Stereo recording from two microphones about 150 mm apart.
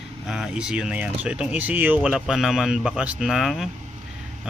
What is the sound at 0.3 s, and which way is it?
Speech, centre (ahead or behind).